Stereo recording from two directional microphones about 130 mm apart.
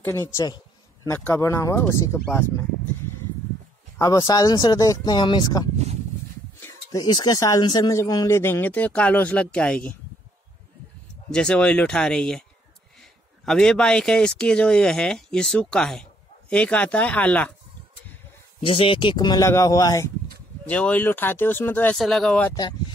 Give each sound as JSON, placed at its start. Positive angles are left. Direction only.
{"t": 0.0, "sound": "speech", "side_deg": 20}
{"t": 4.0, "sound": "speech", "side_deg": 25}
{"t": 6.9, "sound": "speech", "side_deg": 30}
{"t": 11.2, "sound": "speech", "side_deg": 5}
{"t": 13.5, "sound": "speech", "side_deg": 5}
{"t": 18.6, "sound": "speech", "side_deg": 40}
{"t": 20.6, "sound": "speech", "side_deg": 10}
{"t": 21.9, "sound": "speech", "side_deg": 5}
{"t": 22.5, "sound": "speech", "side_deg": 30}